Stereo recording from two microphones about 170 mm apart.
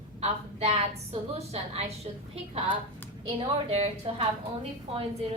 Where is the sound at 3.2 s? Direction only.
35° right (ahead or behind).